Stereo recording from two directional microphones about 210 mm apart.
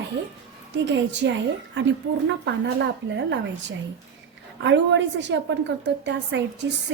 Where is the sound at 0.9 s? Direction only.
55° right (ahead or behind).